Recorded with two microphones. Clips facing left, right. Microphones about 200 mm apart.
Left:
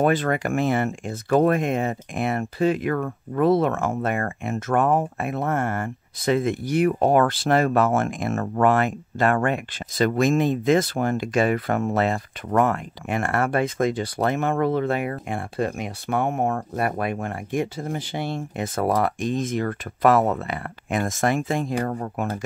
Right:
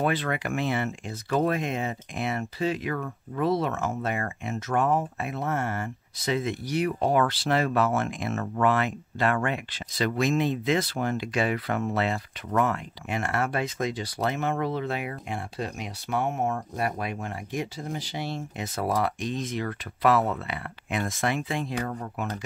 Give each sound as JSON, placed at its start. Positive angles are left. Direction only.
{"t": 0.0, "sound": "speech", "side_deg": 45}